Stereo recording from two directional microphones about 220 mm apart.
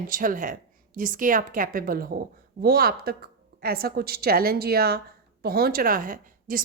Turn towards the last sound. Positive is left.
turn(degrees=-40)  # may be behind; listen again after turning